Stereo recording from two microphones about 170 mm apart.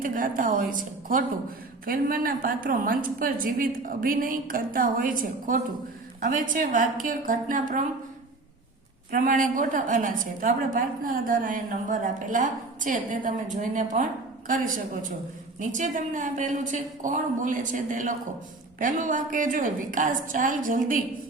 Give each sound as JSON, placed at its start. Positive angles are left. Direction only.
{"t": 0.0, "sound": "a woman's voice", "side_deg": -55}
{"t": 9.1, "sound": "a woman's voice", "side_deg": -50}
{"t": 15.7, "sound": "a woman's voice", "side_deg": -50}